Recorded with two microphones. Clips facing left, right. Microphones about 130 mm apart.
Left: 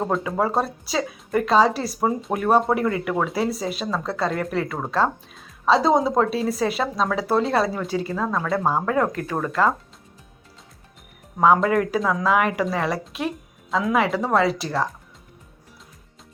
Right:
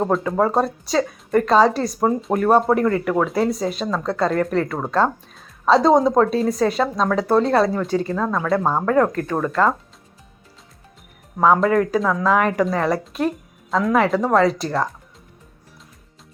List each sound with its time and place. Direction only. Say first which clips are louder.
0.2 s speech: right 4 dB; 5° left (ahead or behind)
11.3 s speech: right 2 dB; 15° left (ahead or behind)